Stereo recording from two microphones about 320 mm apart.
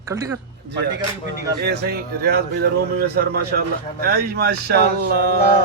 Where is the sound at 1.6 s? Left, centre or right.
Right.